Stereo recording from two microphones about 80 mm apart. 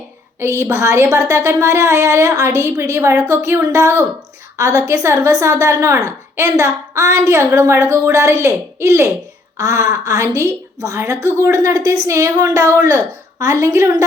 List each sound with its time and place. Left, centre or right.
0.3 s a woman's voice: right